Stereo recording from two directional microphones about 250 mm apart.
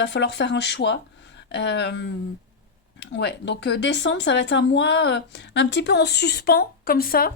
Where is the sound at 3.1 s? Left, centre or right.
Left.